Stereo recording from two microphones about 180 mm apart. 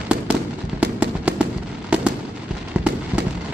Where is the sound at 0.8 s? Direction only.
10° right (ahead or behind).